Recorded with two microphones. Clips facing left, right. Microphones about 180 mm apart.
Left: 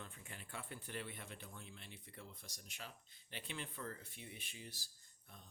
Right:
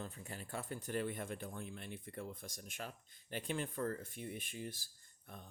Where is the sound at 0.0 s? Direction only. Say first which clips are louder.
Right 7 dB; 40° right (ahead or behind).